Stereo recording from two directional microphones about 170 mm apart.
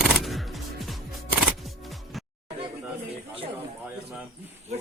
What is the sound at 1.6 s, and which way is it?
Music, centre (ahead or behind).